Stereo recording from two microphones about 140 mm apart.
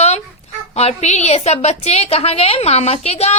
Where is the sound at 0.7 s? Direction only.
50° left (ahead or behind).